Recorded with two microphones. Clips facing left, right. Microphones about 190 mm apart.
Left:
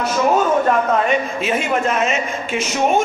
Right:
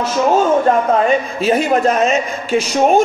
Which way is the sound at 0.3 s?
35° right (ahead or behind).